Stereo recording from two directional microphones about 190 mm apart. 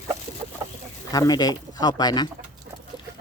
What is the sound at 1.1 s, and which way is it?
Speech, 20° left (ahead or behind).